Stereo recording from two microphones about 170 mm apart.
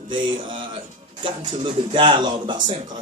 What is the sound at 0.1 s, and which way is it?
Speech, 30° right (ahead or behind).